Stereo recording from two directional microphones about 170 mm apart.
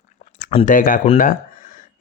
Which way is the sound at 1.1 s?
50° left (ahead or behind).